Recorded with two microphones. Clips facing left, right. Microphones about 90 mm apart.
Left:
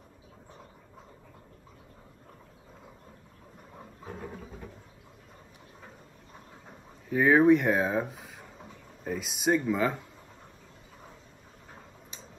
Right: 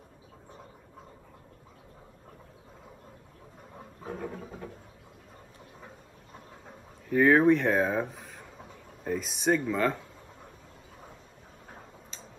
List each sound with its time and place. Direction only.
7.1 s speech: 10° left (ahead or behind)
12.1 s tick-tock: 15° left (ahead or behind)